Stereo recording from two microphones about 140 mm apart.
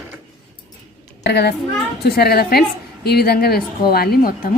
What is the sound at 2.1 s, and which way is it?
A woman's voice, 90° left.